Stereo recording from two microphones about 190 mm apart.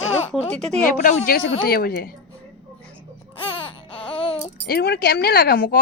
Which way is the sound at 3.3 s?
30° left (ahead or behind).